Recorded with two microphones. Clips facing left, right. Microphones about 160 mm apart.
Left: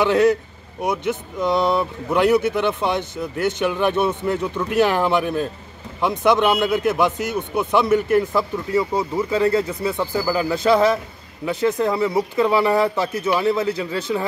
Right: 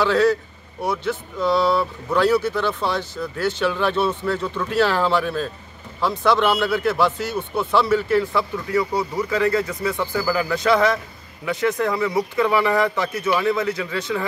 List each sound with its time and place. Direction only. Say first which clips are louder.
0.0 s a man's voice: left 2 dB; 20° left (ahead or behind)